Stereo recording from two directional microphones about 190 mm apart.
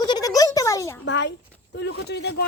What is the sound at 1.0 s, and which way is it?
A man's voice, 65° left (ahead or behind).